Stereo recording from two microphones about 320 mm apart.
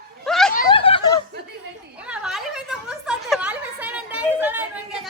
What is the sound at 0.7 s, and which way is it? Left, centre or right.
Snicker, centre.